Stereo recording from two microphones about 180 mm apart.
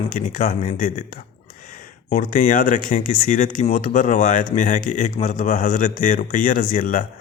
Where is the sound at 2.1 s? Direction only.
50° left (ahead or behind).